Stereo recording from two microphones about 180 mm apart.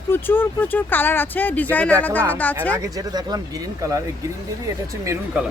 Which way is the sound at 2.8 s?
20° right (ahead or behind).